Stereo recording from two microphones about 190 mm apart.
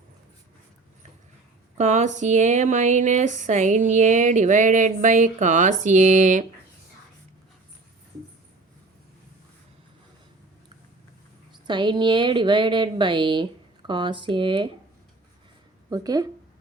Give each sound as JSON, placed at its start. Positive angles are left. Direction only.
{"t": 1.8, "sound": "speech", "side_deg": -40}
{"t": 11.6, "sound": "a woman's voice", "side_deg": -25}
{"t": 15.9, "sound": "a woman's voice", "side_deg": -20}